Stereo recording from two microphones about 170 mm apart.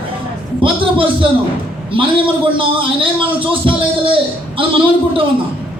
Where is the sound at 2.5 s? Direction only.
30° right (ahead or behind).